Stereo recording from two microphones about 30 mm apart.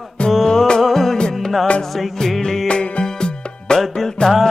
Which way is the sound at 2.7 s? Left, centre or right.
Left.